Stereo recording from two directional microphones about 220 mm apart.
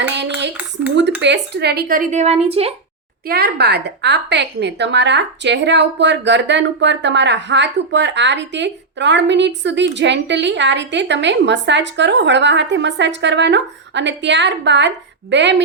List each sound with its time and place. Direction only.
1.2 s speech: 50° right (ahead or behind); by 2.7 s 25° right (ahead or behind)
3.2 s a woman's voice: 45° right (ahead or behind)